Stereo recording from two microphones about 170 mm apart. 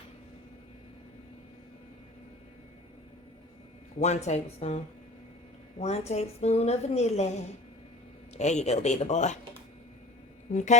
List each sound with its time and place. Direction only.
4.0 s a woman's voice: 40° left (ahead or behind)
5.8 s a woman's voice: 40° left (ahead or behind)
8.4 s speech: 40° left (ahead or behind)
10.5 s speech: 45° left (ahead or behind)